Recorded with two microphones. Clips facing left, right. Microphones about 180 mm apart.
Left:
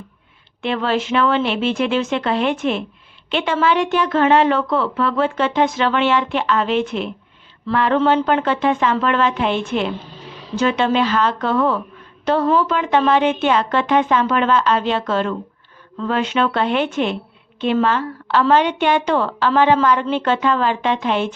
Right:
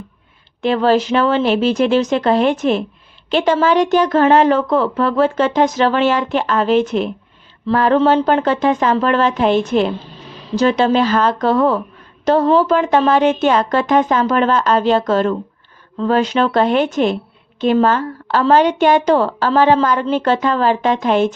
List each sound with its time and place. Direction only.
0.6 s speech: 40° right (ahead or behind)